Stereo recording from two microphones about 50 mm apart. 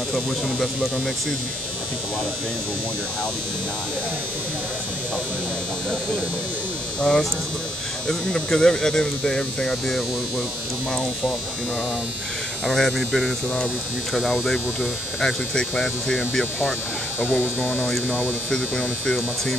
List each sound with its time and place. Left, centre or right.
7.0 s speech: centre
12.6 s speech: centre
17.4 s speech: left
18.5 s speech: centre